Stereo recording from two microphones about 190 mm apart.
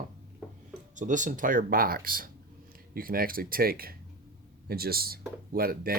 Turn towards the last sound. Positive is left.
turn(degrees=-50)  # may be behind; listen again after turning